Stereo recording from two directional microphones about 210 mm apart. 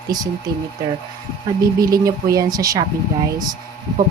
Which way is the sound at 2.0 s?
15° right (ahead or behind).